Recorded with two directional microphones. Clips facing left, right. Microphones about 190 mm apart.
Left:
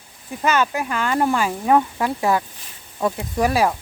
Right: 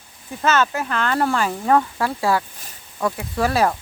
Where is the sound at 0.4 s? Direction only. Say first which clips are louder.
Even; 15° left (ahead or behind).